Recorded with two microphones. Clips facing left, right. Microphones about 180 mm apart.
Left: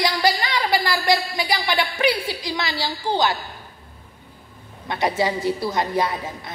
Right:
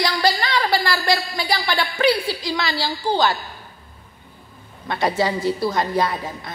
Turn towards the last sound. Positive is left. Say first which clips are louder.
# right 2 dB
turn(degrees=20)  # may be behind; listen again after turning